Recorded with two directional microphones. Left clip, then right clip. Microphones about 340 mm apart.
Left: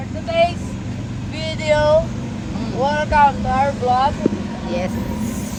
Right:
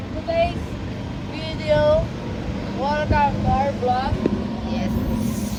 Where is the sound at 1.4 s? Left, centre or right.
Left.